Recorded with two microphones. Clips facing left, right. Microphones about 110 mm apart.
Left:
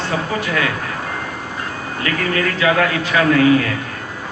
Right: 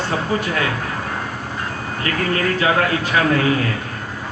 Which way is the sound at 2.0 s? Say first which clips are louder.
Even; 35° right (ahead or behind).